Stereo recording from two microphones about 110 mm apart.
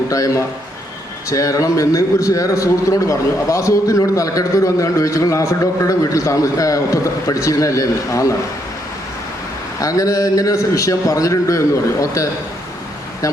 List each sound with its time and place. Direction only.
0.1 s a man's voice: 30° left (ahead or behind)
9.8 s a man's voice: 30° left (ahead or behind)